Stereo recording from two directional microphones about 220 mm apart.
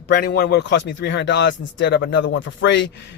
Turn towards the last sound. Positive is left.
turn(degrees=55)  # may be behind; listen again after turning